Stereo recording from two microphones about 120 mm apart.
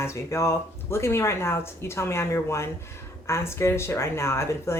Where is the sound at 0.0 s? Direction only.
25° left (ahead or behind).